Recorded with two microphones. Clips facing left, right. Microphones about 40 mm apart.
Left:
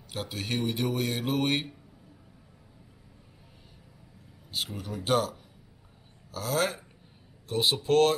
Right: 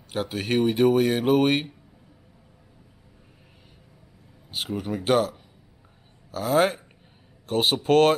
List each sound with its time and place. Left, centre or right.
0.1 s speech: centre
0.7 s a sound: centre
4.7 s speech: right
7.4 s speech: right